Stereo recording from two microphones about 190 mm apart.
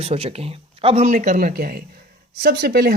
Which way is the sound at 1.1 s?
45° right (ahead or behind).